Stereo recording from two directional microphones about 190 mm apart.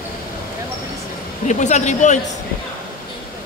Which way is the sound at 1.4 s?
40° left (ahead or behind).